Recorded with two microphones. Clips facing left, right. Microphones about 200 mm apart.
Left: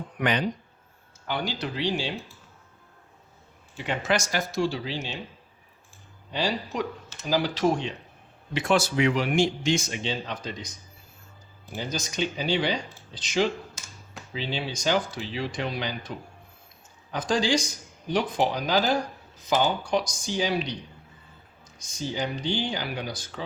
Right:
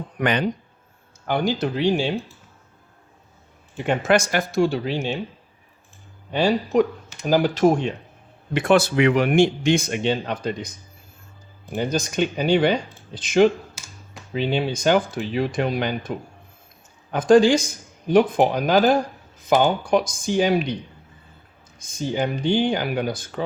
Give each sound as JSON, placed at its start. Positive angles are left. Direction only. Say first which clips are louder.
{"t": 0.2, "sound": "speech", "louder": "right 4 dB", "side_deg": -55}
{"t": 3.8, "sound": "speech", "louder": "right 7 dB", "side_deg": -50}
{"t": 6.3, "sound": "speech", "louder": "right 10 dB", "side_deg": -55}
{"t": 11.7, "sound": "speech", "louder": "right 9 dB", "side_deg": -55}
{"t": 21.8, "sound": "speech", "louder": "right 6 dB", "side_deg": -55}